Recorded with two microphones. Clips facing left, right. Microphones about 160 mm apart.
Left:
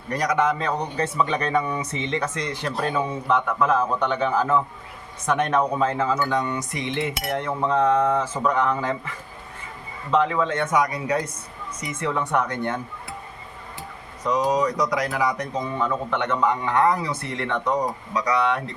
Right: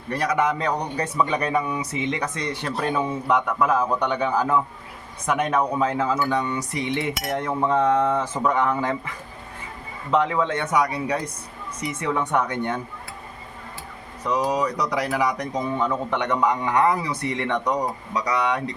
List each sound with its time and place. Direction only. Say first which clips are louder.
0.2 s speech: even; 10° right (ahead or behind)
11.9 s speech: even; 15° right (ahead or behind)
14.3 s speech: left 2 dB; 10° right (ahead or behind)